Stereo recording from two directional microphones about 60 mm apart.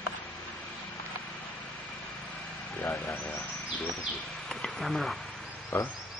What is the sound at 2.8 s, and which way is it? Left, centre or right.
Speech, left.